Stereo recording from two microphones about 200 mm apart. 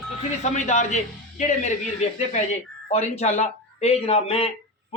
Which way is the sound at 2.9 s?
35° left (ahead or behind).